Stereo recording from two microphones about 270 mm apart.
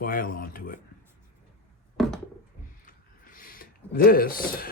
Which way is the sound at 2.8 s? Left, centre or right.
Left.